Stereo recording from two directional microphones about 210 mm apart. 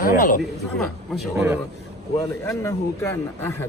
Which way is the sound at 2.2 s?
15° left (ahead or behind).